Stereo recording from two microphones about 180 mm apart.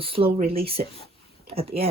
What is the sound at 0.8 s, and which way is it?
Speech, 45° right (ahead or behind).